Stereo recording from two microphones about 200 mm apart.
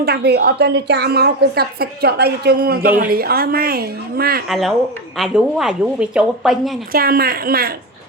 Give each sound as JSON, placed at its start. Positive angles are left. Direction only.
{"t": 0.0, "sound": "a woman's voice", "side_deg": -50}
{"t": 4.4, "sound": "a woman's voice", "side_deg": 0}
{"t": 6.9, "sound": "a woman's voice", "side_deg": -50}